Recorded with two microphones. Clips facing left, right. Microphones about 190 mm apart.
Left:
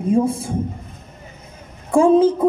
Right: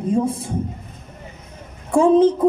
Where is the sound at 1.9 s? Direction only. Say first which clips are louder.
Left 1 dB; centre (ahead or behind).